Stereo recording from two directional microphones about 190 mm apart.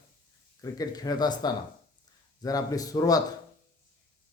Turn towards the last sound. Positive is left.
turn(degrees=20)  # may be behind; listen again after turning